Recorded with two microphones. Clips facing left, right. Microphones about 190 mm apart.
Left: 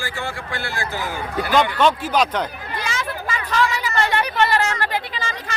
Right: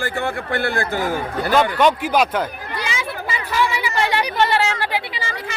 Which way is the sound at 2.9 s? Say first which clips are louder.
Left 1 dB; 15° right (ahead or behind).